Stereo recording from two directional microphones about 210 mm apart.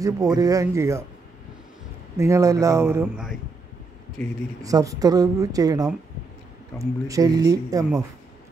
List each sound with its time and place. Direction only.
0.0 s speech: 15° right (ahead or behind)
2.1 s speech: 15° right (ahead or behind)
4.6 s speech: 15° right (ahead or behind)